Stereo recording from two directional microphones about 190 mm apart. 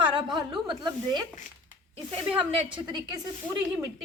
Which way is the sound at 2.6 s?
25° right (ahead or behind).